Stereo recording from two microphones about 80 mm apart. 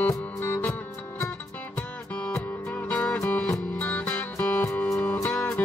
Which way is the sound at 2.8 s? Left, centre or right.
Centre.